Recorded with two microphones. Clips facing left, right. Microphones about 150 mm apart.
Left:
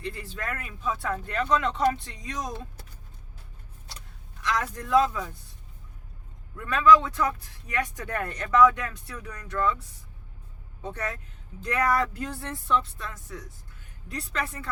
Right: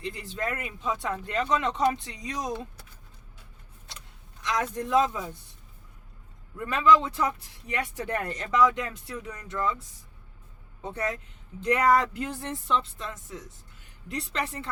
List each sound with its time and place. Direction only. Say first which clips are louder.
0.0 s speech: right 2 dB; 20° right (ahead or behind)
4.4 s speech: right 1 dB; 20° right (ahead or behind)
6.7 s speech: left 2 dB; 25° right (ahead or behind)
10.8 s speech: right 2 dB; 20° right (ahead or behind)